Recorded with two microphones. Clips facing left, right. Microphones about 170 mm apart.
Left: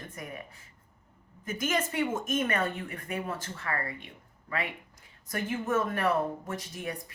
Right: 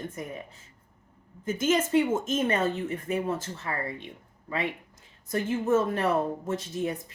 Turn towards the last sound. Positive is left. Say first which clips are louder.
# right 6 dB
turn(degrees=-25)  # may be behind; listen again after turning